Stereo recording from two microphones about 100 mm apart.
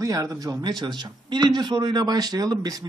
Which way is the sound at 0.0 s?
35° right (ahead or behind).